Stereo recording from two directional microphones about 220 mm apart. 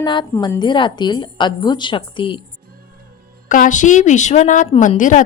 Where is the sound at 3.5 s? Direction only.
35° left (ahead or behind).